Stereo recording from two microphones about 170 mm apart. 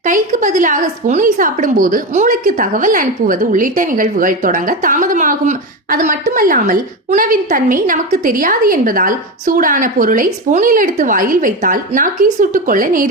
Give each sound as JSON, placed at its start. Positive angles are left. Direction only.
{"t": 0.0, "sound": "a woman's voice", "side_deg": -50}